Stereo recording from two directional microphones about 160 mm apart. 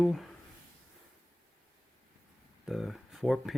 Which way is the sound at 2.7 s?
Centre (ahead or behind).